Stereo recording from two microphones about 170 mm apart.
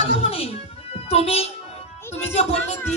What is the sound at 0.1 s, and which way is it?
Music, 35° left (ahead or behind).